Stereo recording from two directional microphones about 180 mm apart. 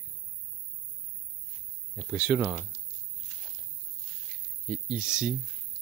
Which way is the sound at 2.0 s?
5° right (ahead or behind).